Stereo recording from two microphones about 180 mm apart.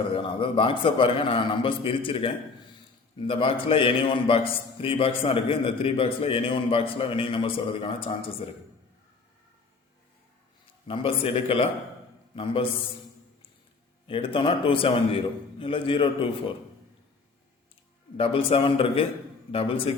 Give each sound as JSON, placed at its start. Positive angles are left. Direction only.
{"t": 0.1, "sound": "a man's voice", "side_deg": 30}
{"t": 10.8, "sound": "a man's voice", "side_deg": 30}
{"t": 14.1, "sound": "a man's voice", "side_deg": 30}
{"t": 18.2, "sound": "a man's voice", "side_deg": 30}